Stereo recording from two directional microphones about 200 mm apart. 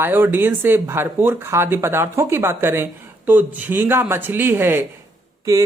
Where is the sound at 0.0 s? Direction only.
10° right (ahead or behind).